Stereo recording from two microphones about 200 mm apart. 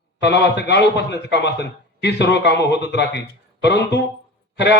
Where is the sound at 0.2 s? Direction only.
60° left (ahead or behind).